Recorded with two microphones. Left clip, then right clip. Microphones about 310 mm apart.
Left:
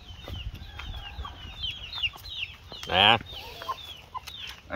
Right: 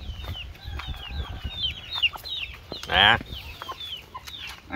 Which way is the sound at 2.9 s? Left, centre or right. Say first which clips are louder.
Right 2 dB; left.